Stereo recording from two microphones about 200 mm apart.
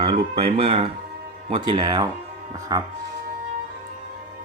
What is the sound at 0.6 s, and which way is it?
Speech, 30° right (ahead or behind).